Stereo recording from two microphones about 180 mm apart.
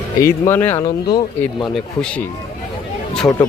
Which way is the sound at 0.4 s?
10° left (ahead or behind).